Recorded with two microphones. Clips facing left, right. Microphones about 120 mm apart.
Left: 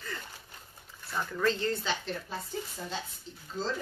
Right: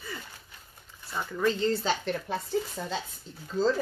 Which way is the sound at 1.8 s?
45° right (ahead or behind).